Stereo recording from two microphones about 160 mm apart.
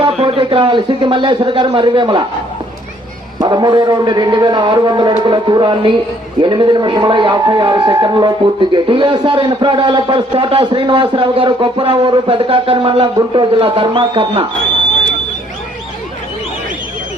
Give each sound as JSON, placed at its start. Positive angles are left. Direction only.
{"t": 0.0, "sound": "a man's voice", "side_deg": -35}
{"t": 3.4, "sound": "a man's voice", "side_deg": -25}